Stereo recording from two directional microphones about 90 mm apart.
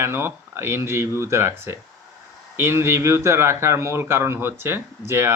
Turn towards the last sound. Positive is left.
turn(degrees=-30)  # may be behind; listen again after turning